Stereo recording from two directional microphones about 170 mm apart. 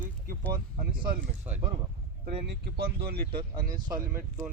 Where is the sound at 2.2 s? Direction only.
70° right (ahead or behind).